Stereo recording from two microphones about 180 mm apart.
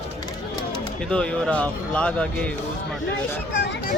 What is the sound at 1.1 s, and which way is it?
Speech, 5° left (ahead or behind).